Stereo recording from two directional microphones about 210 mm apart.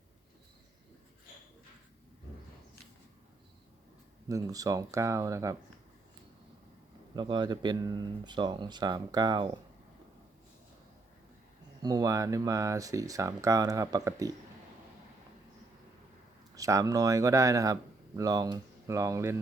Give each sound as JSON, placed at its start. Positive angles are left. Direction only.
{"t": 4.3, "sound": "speech", "side_deg": -15}
{"t": 7.2, "sound": "speech", "side_deg": -20}
{"t": 11.8, "sound": "speech", "side_deg": -20}
{"t": 16.6, "sound": "speech", "side_deg": -15}